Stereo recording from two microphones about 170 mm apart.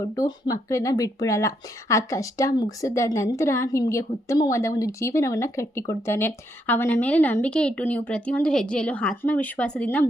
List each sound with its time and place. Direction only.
0.0 s speech: 20° left (ahead or behind)